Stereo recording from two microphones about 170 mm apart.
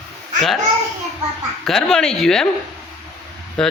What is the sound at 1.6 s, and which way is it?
Speech, centre (ahead or behind).